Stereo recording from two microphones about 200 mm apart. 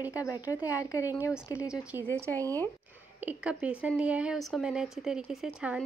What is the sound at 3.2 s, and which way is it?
Speech, 10° right (ahead or behind).